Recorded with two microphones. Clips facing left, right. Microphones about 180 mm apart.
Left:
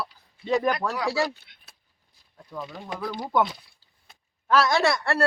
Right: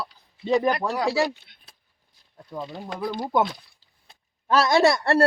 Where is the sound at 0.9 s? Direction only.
35° right (ahead or behind).